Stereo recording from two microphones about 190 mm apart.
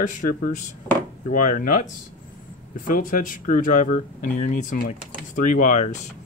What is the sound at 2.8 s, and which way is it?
Speech, 45° left (ahead or behind).